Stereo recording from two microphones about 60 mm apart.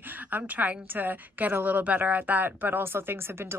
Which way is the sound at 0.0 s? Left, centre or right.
Right.